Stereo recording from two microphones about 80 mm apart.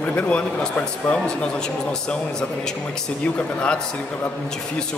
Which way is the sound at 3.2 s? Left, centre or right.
Centre.